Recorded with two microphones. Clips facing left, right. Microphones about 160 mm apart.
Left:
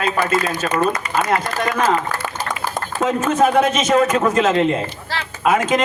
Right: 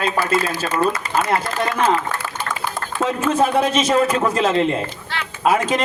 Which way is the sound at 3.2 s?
30° right (ahead or behind).